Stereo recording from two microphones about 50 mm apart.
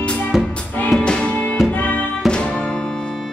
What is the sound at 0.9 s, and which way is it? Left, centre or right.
Music, centre.